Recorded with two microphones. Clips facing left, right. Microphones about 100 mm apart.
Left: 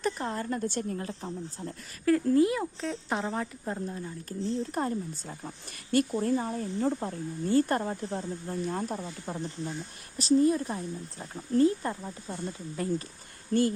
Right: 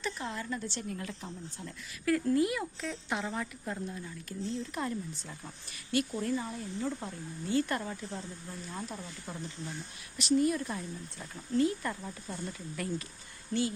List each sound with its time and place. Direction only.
0.0 s a woman's voice: 45° left (ahead or behind)
10.2 s a woman's voice: 30° left (ahead or behind)
13.5 s speech: 50° left (ahead or behind)